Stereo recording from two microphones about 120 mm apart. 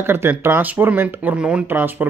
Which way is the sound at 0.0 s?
20° right (ahead or behind).